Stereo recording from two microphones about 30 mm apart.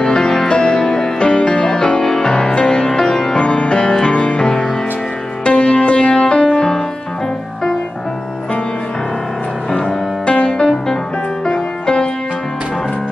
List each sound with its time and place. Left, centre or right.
0.1 s music: left
9.7 s music: left